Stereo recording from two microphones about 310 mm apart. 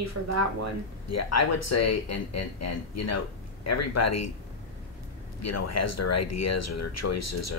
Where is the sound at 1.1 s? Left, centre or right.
Left.